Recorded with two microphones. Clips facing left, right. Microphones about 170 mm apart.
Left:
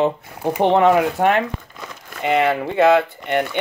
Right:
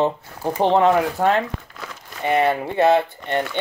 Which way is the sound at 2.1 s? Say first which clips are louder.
Left 2 dB; 50° left (ahead or behind).